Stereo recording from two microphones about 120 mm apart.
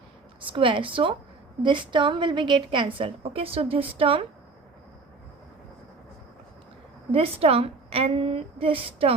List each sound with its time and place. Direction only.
0.5 s a woman's voice: 45° right (ahead or behind)
7.1 s a woman's voice: 55° right (ahead or behind)